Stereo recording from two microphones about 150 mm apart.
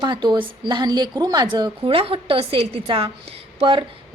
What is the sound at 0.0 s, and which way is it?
A woman's voice, 30° right (ahead or behind).